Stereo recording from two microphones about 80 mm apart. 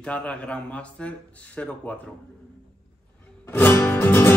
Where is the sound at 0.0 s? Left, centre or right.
Centre.